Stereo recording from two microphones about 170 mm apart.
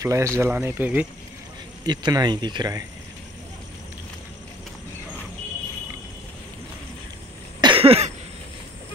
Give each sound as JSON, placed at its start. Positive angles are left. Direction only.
{"t": 0.0, "sound": "speech", "side_deg": -15}
{"t": 1.9, "sound": "speech", "side_deg": -25}
{"t": 7.6, "sound": "cough", "side_deg": -35}